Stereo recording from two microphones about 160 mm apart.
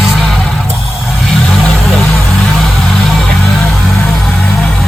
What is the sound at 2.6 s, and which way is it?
Music, centre (ahead or behind).